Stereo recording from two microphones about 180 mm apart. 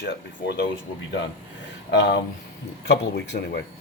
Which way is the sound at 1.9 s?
75° left (ahead or behind).